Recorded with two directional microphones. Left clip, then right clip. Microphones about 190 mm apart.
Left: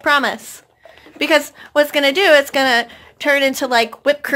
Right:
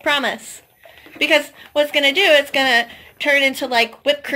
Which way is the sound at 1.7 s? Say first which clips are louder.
Left 1 dB; 25° left (ahead or behind).